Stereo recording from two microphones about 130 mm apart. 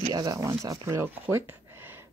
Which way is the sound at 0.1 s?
30° right (ahead or behind).